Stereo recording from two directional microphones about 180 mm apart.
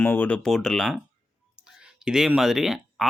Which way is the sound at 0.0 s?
10° left (ahead or behind).